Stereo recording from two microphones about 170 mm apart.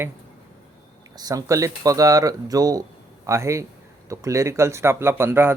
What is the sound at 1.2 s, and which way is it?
A man's voice, 20° right (ahead or behind).